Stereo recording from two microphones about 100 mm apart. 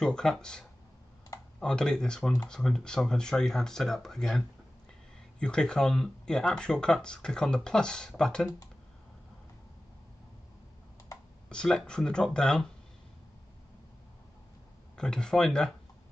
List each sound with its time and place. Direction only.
0.0 s speech: 5° left (ahead or behind)
11.4 s speech: 10° left (ahead or behind)
15.0 s speech: 10° left (ahead or behind)